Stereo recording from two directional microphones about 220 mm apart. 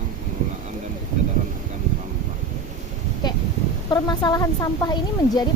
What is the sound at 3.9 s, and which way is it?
A woman's voice, 20° left (ahead or behind).